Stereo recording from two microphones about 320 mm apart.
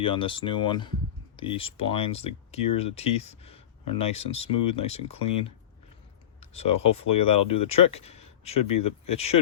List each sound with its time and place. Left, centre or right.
0.0 s speech: centre